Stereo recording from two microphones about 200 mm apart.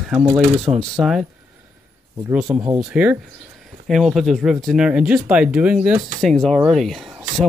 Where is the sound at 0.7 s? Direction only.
20° right (ahead or behind).